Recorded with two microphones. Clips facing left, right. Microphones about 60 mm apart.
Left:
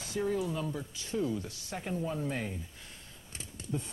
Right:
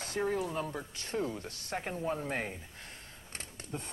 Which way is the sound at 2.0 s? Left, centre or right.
Right.